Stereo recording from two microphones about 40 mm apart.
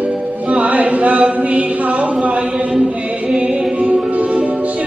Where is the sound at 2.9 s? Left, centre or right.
Right.